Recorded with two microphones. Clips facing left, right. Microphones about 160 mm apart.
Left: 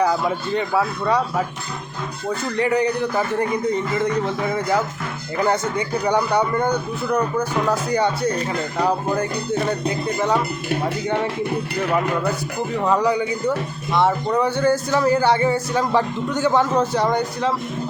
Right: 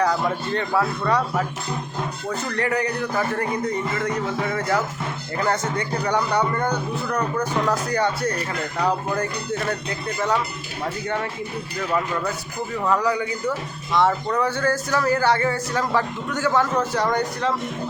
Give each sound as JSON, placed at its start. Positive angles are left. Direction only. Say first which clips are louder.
{"t": 0.0, "sound": "a man's voice", "louder": "left 2 dB", "side_deg": 10}
{"t": 2.6, "sound": "a man's voice", "louder": "left 5 dB", "side_deg": 15}
{"t": 5.5, "sound": "a man's voice", "louder": "left 2 dB", "side_deg": 10}
{"t": 11.9, "sound": "speech", "louder": "left 2 dB", "side_deg": 65}
{"t": 12.8, "sound": "a man's voice", "louder": "left 2 dB", "side_deg": 20}